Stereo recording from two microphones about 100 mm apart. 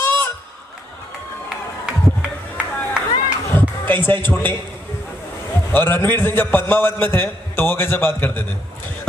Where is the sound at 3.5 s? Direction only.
20° left (ahead or behind).